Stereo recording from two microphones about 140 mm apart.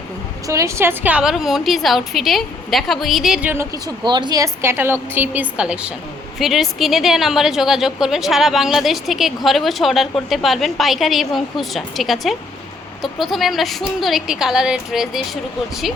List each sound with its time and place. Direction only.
0.4 s a woman's voice: 20° right (ahead or behind)
3.8 s a woman's voice: 30° right (ahead or behind); by 15.2 s 5° right (ahead or behind)